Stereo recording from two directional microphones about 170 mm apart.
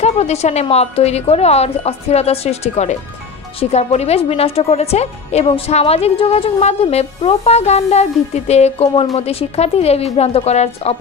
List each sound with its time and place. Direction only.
0.0 s a woman's voice: 40° left (ahead or behind)